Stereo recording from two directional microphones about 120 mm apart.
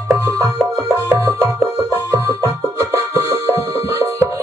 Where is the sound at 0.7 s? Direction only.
15° right (ahead or behind).